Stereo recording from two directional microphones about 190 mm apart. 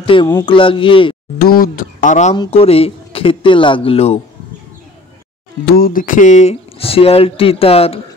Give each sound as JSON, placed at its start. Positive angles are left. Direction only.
{"t": 0.0, "sound": "speech", "side_deg": 25}
{"t": 1.4, "sound": "speech", "side_deg": 50}
{"t": 2.3, "sound": "speech", "side_deg": 25}
{"t": 5.8, "sound": "speech", "side_deg": 50}